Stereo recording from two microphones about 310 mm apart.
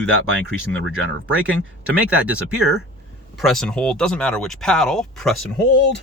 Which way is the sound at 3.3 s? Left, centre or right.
Centre.